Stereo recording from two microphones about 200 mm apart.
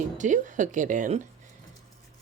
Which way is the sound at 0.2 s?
40° right (ahead or behind).